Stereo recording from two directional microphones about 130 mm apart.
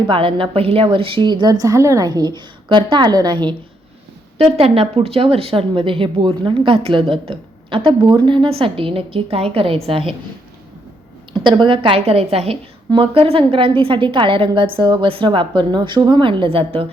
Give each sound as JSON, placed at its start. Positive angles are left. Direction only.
{"t": 0.1, "sound": "a woman's voice", "side_deg": -40}
{"t": 4.4, "sound": "speech", "side_deg": -50}
{"t": 11.3, "sound": "a woman's voice", "side_deg": -35}